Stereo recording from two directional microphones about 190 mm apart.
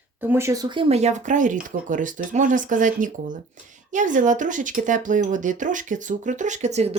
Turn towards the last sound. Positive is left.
turn(degrees=-35)  # may be behind; listen again after turning